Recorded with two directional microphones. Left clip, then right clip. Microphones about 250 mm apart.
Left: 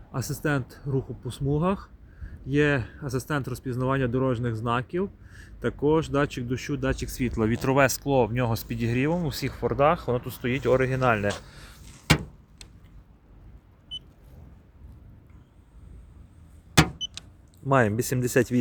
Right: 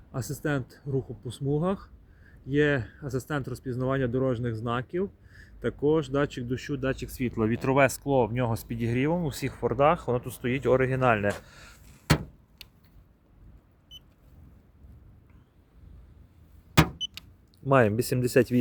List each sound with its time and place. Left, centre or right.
0.1 s speech: centre
16.7 s power windows: right
17.7 s speech: centre